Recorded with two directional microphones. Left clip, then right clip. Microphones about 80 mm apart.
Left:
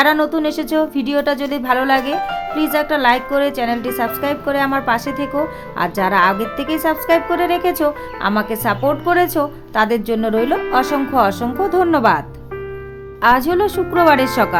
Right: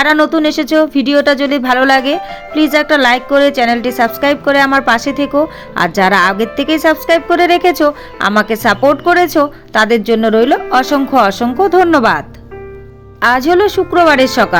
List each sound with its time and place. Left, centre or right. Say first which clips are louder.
0.0 s a woman's voice: right 4 dB; right
5.7 s speech: right 6 dB; right
13.1 s speech: right 4 dB; right